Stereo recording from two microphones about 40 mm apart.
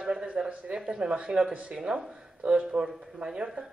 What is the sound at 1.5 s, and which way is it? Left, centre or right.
A woman's voice, right.